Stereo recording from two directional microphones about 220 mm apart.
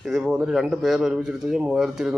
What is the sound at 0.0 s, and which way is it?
A man's voice, centre (ahead or behind).